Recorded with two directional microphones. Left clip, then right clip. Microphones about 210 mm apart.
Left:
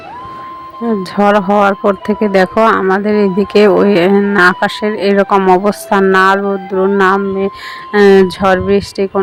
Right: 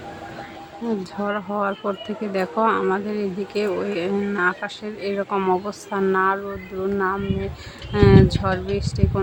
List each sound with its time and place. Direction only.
1.2 s speech: 35° left (ahead or behind)